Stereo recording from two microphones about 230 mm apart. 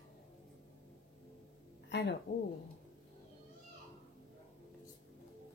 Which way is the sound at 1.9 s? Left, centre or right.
Left.